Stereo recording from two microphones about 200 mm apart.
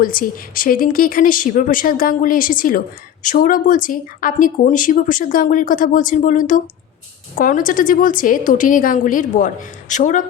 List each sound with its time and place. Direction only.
0.0 s a woman's voice: 45° left (ahead or behind)